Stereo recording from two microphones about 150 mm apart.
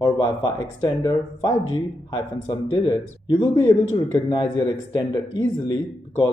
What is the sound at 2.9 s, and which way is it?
Speech, 20° left (ahead or behind).